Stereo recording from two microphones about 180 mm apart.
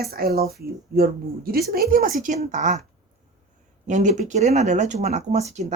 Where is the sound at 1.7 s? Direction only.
55° right (ahead or behind).